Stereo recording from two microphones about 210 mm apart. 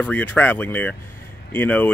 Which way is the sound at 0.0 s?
10° left (ahead or behind).